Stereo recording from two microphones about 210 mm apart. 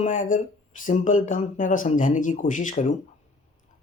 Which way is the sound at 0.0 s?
40° left (ahead or behind).